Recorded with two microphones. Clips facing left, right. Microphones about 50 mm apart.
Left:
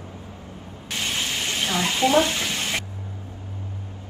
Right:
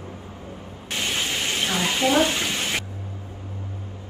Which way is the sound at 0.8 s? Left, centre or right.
Right.